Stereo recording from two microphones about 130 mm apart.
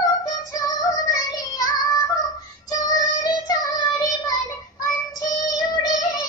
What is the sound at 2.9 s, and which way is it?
Child singing, 25° left (ahead or behind).